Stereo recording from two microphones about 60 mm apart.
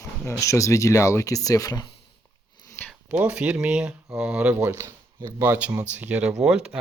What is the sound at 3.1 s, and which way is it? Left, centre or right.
Speech, right.